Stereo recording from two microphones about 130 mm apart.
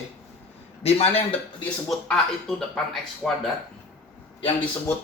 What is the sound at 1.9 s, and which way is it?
Speech, 5° left (ahead or behind).